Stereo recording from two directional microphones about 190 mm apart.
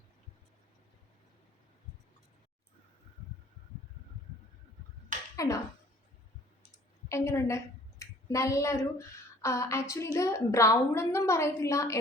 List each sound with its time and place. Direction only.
5.4 s speech: 15° left (ahead or behind)
7.3 s speech: 15° left (ahead or behind)